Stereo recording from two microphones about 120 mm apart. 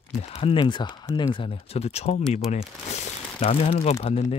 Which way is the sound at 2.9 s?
55° left (ahead or behind).